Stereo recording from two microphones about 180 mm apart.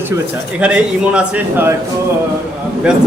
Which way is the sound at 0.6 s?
5° right (ahead or behind).